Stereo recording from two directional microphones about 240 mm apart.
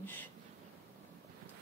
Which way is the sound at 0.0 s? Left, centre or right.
Centre.